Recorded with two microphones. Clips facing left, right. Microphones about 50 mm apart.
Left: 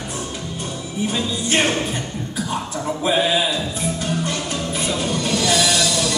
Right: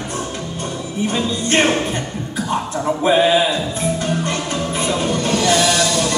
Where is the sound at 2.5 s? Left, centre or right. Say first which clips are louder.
Right 6 dB; centre.